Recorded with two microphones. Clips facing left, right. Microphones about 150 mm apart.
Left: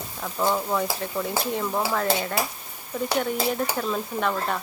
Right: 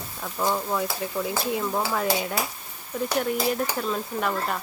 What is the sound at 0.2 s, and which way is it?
Speech, centre (ahead or behind).